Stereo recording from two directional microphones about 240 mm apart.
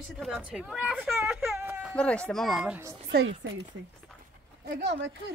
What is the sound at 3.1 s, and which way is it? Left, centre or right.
Speech, right.